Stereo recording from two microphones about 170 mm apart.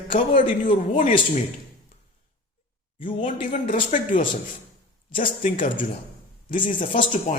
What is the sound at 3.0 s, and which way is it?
Speech, 50° left (ahead or behind).